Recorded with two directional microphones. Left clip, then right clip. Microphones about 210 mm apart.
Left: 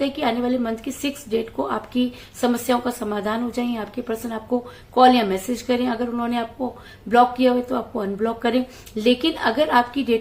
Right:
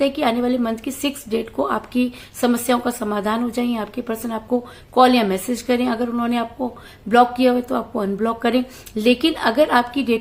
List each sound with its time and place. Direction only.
0.0 s speech: 25° right (ahead or behind)